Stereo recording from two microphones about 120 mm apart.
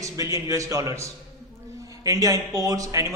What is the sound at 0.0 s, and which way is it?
A man's voice, 25° right (ahead or behind).